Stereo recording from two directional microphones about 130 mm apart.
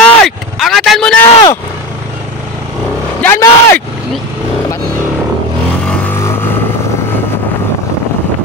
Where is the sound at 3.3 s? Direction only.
25° left (ahead or behind).